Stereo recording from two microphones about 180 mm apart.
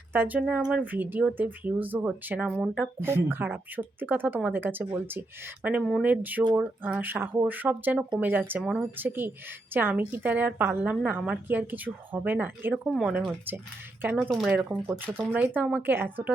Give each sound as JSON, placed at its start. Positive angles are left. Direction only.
{"t": 0.1, "sound": "a woman's voice", "side_deg": -10}